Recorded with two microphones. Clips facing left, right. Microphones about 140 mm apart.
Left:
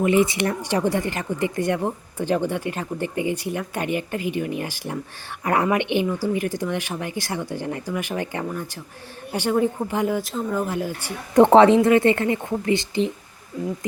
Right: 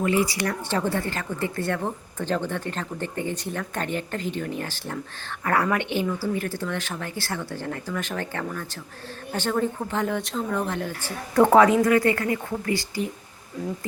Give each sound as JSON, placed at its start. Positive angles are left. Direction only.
{"t": 0.0, "sound": "speech", "side_deg": 20}
{"t": 11.3, "sound": "speech", "side_deg": 25}